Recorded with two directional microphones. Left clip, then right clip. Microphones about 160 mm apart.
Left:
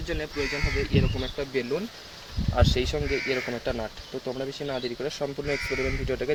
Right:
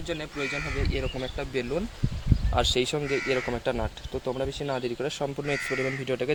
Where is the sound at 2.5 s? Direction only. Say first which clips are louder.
Right 1 dB; 70° right (ahead or behind).